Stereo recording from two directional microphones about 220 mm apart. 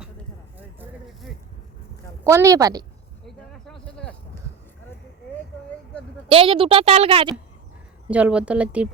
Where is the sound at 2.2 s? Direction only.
15° right (ahead or behind).